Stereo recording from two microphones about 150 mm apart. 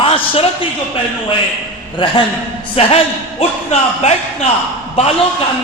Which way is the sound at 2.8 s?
40° left (ahead or behind).